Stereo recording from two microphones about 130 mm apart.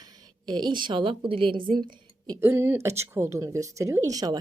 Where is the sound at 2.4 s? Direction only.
20° right (ahead or behind).